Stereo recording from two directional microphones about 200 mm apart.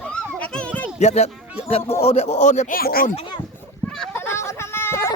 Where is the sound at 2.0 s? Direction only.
30° left (ahead or behind); by 3.1 s 50° left (ahead or behind).